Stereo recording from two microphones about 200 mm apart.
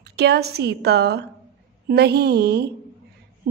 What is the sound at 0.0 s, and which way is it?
A woman's voice, 55° right (ahead or behind).